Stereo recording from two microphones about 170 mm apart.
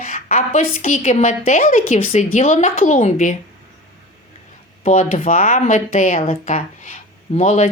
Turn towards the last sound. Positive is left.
turn(degrees=40)  # may be behind; listen again after turning